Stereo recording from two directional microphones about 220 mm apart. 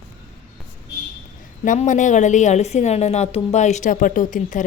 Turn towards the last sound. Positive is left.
turn(degrees=35)  # may be behind; listen again after turning